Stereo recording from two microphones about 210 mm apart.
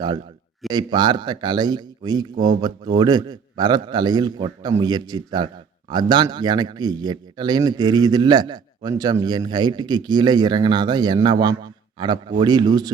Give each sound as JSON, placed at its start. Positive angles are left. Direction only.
{"t": 0.7, "sound": "speech", "side_deg": -20}